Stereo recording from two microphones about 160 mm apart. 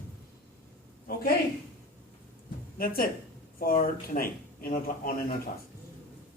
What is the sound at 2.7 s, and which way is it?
Speech, 65° left (ahead or behind).